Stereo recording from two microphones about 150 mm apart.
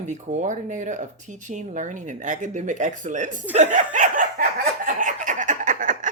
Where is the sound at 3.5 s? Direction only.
55° right (ahead or behind).